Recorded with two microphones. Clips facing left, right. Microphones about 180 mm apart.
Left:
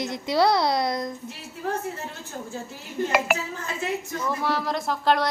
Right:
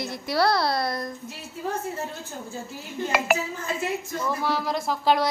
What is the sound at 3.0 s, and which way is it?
A woman's voice, centre (ahead or behind).